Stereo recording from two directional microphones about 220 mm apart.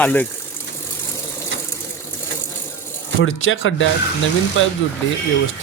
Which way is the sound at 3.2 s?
65° left (ahead or behind).